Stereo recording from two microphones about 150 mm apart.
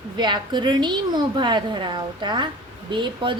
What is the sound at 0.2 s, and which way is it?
A woman's voice, 30° right (ahead or behind).